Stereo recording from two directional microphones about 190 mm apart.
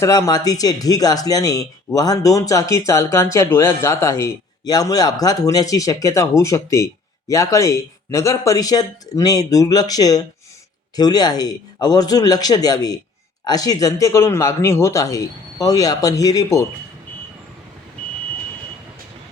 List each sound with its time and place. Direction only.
0.0 s speech: 15° left (ahead or behind)